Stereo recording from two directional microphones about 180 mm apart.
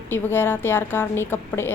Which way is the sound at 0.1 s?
10° left (ahead or behind).